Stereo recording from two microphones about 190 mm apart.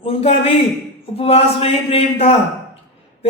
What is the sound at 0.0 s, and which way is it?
A man's voice, 30° left (ahead or behind).